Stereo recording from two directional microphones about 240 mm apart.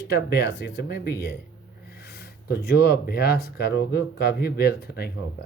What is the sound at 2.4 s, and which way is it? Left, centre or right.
Speech, left.